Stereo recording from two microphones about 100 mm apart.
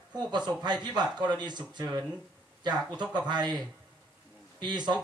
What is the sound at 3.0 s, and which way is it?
A man's voice, 45° right (ahead or behind).